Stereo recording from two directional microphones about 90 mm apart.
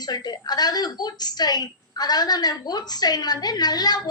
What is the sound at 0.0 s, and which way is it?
A woman's voice, 50° left (ahead or behind).